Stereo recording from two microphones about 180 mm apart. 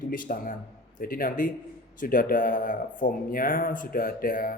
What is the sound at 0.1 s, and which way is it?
Speech, 50° left (ahead or behind).